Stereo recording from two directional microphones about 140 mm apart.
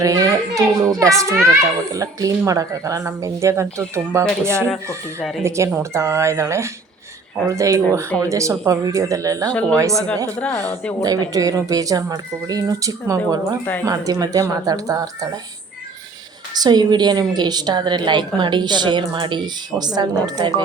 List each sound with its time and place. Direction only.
0.0 s speech: 25° right (ahead or behind)
9.5 s speech: 10° left (ahead or behind)
11.0 s speech: 25° right (ahead or behind)
16.6 s a woman's voice: 30° right (ahead or behind)